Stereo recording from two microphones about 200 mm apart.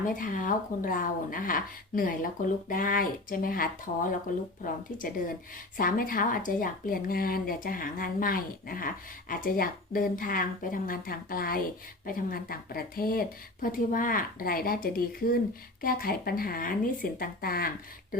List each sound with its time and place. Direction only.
0.1 s speech: 40° left (ahead or behind)